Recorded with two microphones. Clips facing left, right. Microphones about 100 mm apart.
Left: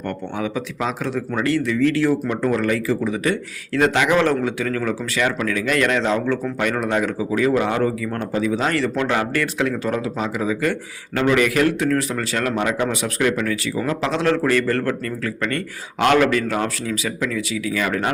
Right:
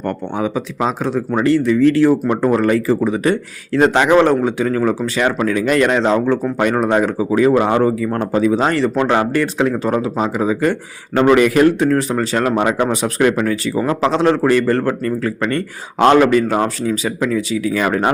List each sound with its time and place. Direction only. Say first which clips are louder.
0.3 s a man's voice: right 5 dB; 25° right (ahead or behind)